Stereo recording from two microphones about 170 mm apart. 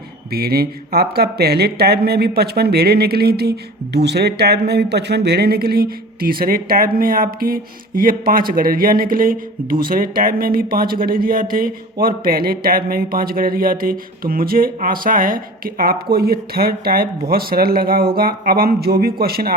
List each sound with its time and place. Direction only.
0.3 s speech: 65° right (ahead or behind)